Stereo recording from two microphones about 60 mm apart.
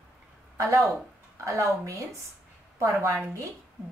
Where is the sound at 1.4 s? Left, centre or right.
Right.